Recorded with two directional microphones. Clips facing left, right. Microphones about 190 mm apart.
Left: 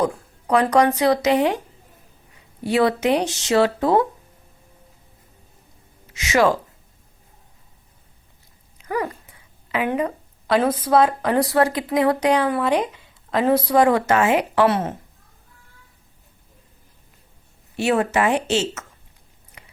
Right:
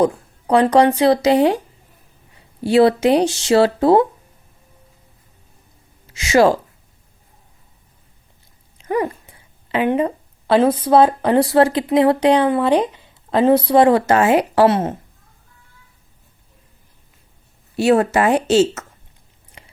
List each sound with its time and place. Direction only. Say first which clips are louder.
0.0 s speech: right 5 dB; 30° right (ahead or behind)
2.6 s speech: right 5 dB; 30° right (ahead or behind)
6.1 s speech: right 4 dB; 30° right (ahead or behind)
8.8 s dog: right 5 dB; 25° right (ahead or behind)
9.7 s speech: right 5 dB; 30° right (ahead or behind)
17.7 s speech: right 5 dB; 35° right (ahead or behind)
19.6 s a sound: right 3 dB; 30° right (ahead or behind)